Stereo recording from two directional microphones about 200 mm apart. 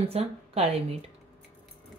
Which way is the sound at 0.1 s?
30° right (ahead or behind).